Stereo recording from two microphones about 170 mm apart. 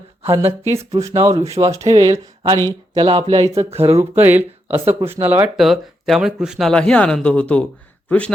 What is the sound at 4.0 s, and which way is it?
Speech, 10° right (ahead or behind).